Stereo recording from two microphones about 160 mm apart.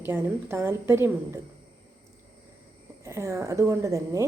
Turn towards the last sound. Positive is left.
turn(degrees=-20)  # may be behind; listen again after turning